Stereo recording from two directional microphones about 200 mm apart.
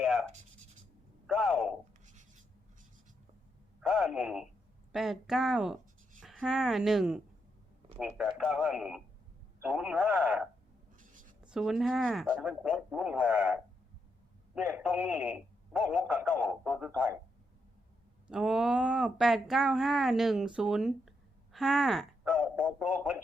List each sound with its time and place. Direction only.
0.0 s writing: centre (ahead or behind)
1.3 s a sound: centre (ahead or behind)
3.8 s speech: 5° right (ahead or behind)
11.0 s a sound: 40° right (ahead or behind)
11.4 s speech: centre (ahead or behind)
18.3 s speech: 5° right (ahead or behind)